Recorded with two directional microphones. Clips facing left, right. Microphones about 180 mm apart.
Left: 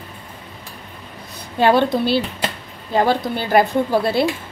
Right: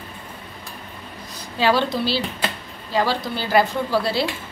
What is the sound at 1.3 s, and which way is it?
A woman's voice, 55° left (ahead or behind).